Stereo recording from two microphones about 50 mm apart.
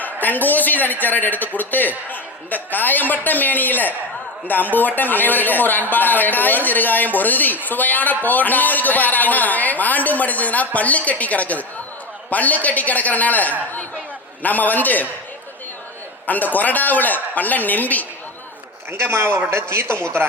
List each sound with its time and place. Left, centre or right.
0.0 s speech: left
16.2 s speech: left
18.9 s a man's voice: right